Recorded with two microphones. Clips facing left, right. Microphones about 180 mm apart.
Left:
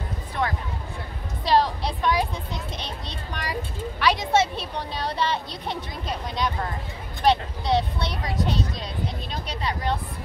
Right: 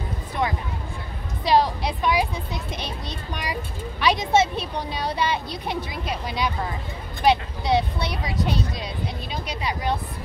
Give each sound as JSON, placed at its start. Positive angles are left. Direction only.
{"t": 0.4, "sound": "speech", "side_deg": -15}